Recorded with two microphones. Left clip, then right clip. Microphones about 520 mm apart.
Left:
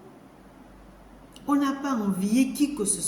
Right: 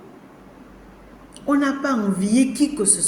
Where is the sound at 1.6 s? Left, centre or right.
Left.